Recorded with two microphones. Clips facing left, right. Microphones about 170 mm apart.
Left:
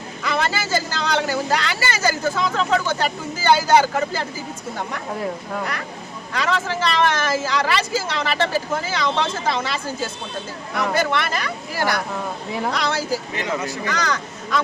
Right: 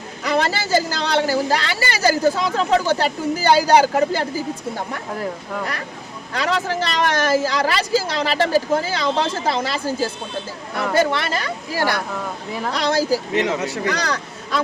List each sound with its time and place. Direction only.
0.2 s speech: 40° right (ahead or behind)
6.3 s speech: 35° right (ahead or behind)
13.3 s speech: 75° right (ahead or behind)
13.9 s a man's voice: 35° right (ahead or behind)